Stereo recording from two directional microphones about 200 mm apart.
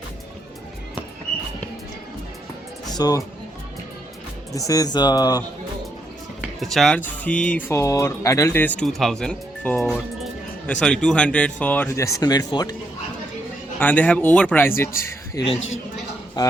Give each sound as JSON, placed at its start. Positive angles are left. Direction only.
{"t": 2.8, "sound": "speech", "side_deg": 20}
{"t": 4.5, "sound": "speech", "side_deg": 15}
{"t": 6.6, "sound": "speech", "side_deg": 0}
{"t": 13.7, "sound": "speech", "side_deg": 10}